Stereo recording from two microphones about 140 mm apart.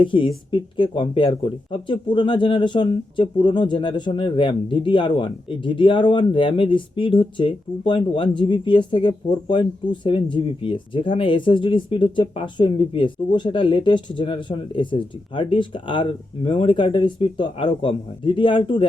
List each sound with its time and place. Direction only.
0.0 s speech: 35° left (ahead or behind)